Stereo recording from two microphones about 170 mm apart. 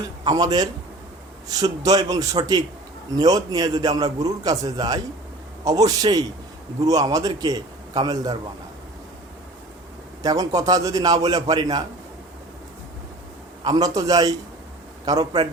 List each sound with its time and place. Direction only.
0.3 s a man's voice: 25° right (ahead or behind)
10.2 s a man's voice: 20° right (ahead or behind)
13.7 s a man's voice: 20° right (ahead or behind)